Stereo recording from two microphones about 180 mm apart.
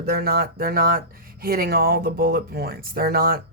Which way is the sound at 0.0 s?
55° right (ahead or behind).